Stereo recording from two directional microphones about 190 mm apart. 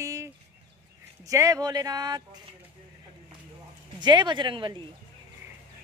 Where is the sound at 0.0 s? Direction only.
15° right (ahead or behind).